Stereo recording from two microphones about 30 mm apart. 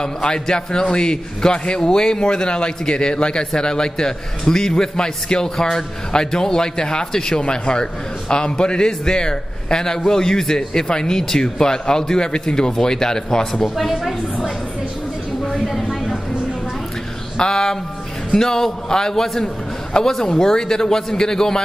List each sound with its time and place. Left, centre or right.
0.0 s a man's voice: left
13.4 s a woman's voice: centre
15.7 s a sound: centre
17.4 s a man's voice: left
19.4 s a sound: left
20.1 s a woman's voice: centre